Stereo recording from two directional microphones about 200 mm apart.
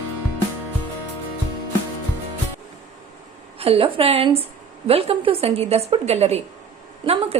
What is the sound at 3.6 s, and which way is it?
A woman's voice, 30° right (ahead or behind).